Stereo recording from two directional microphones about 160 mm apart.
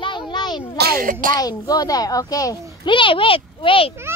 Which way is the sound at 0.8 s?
65° right (ahead or behind).